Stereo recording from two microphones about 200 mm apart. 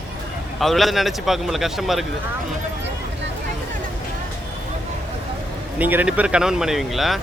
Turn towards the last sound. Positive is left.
turn(degrees=0)  # may be behind; listen again after turning